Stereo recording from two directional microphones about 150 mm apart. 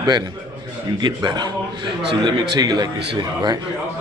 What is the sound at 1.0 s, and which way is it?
A man's voice, 25° right (ahead or behind).